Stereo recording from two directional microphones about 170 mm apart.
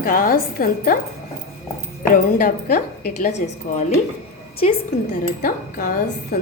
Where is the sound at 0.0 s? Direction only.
55° left (ahead or behind).